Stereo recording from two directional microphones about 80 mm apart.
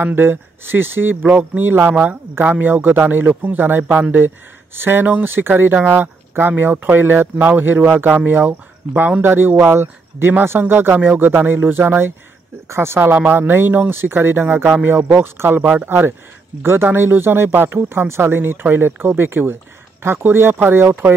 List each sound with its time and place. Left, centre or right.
0.0 s speech: right